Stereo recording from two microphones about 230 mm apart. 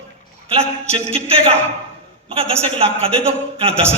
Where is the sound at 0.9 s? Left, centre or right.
Right.